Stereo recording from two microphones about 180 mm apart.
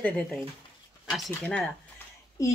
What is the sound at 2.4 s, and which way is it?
Speech, 15° left (ahead or behind).